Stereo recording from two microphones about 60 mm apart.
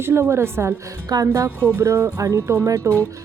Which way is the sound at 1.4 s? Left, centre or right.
Right.